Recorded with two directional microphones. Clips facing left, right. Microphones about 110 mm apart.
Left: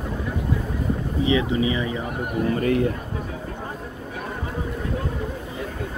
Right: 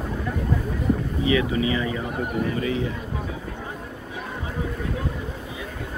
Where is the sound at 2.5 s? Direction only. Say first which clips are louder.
Left 4 dB; 50° left (ahead or behind).